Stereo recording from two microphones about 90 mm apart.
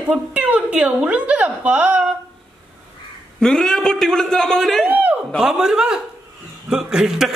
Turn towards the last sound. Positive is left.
turn(degrees=-5)  # may be behind; listen again after turning